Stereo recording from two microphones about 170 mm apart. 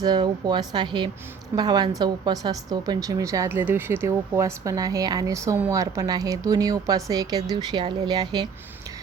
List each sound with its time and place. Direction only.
0.0 s a woman's voice: 25° right (ahead or behind)